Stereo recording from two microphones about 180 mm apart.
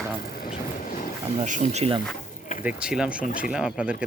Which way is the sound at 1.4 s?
40° right (ahead or behind).